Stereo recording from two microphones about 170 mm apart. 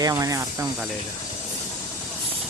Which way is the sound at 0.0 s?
20° right (ahead or behind).